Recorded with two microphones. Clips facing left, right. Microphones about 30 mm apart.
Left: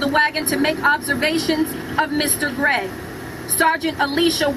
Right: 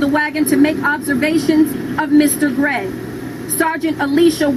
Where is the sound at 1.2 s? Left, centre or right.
Left.